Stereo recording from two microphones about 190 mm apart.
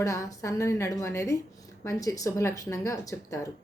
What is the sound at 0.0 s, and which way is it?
A woman's voice, 15° left (ahead or behind).